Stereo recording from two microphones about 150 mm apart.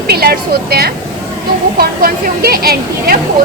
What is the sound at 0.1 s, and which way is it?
A woman's voice, 90° right.